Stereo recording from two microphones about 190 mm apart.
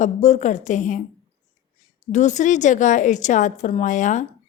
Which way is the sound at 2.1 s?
40° left (ahead or behind).